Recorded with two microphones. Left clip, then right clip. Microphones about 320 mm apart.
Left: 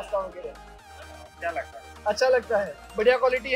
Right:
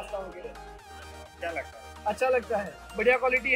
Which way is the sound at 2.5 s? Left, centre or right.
Centre.